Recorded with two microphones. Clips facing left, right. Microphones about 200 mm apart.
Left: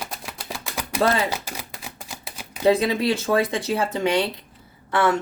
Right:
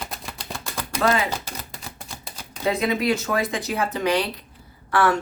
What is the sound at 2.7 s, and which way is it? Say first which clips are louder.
A woman's voice: left 3 dB; 30° left (ahead or behind).